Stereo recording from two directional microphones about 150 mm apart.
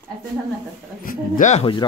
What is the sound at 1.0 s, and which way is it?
Speech, 60° left (ahead or behind).